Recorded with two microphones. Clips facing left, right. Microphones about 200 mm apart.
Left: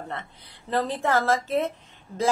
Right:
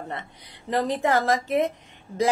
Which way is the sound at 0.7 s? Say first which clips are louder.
Right 2 dB; 15° right (ahead or behind).